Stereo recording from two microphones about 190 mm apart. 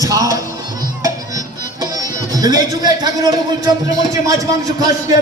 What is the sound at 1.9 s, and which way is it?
Speech, 20° right (ahead or behind).